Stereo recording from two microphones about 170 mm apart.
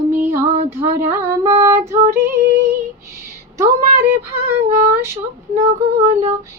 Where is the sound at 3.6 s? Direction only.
15° right (ahead or behind).